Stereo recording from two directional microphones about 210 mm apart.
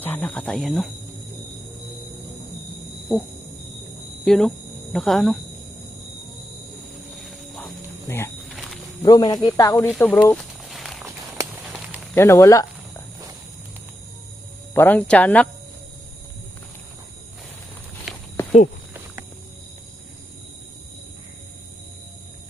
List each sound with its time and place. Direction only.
0.0 s speech: 10° left (ahead or behind)
3.1 s speech: centre (ahead or behind)
4.3 s speech: centre (ahead or behind)
7.3 s music: centre (ahead or behind)
8.0 s speech: 10° left (ahead or behind)
8.4 s a sound: centre (ahead or behind)
9.0 s speech: 15° left (ahead or behind)
10.3 s a sound: centre (ahead or behind)
12.1 s speech: 15° left (ahead or behind)
14.7 s speech: 10° left (ahead or behind)
18.1 s walk: centre (ahead or behind)